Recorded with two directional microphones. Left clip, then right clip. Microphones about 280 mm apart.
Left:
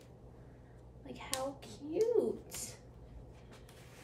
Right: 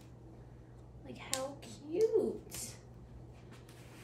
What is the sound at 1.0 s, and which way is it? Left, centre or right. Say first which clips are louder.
Finger snapping: left 1 dB; centre.